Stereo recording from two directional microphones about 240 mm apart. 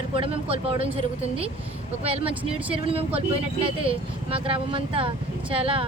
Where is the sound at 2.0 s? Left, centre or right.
Right.